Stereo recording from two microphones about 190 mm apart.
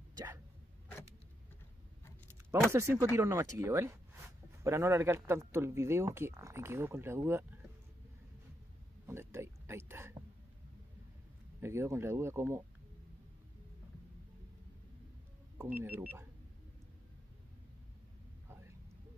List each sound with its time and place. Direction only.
0.1 s dog: 20° right (ahead or behind)
2.7 s speech: 15° right (ahead or behind)
9.0 s a sound: 15° right (ahead or behind)
11.6 s speech: 15° right (ahead or behind)
15.5 s speech: 15° right (ahead or behind)